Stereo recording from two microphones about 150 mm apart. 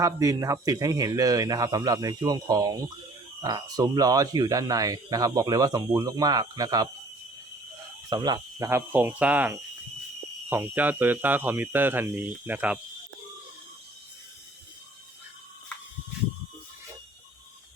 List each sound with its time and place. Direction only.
0.0 s speech: 20° right (ahead or behind)
8.1 s speech: 30° right (ahead or behind); by 12.8 s 10° right (ahead or behind)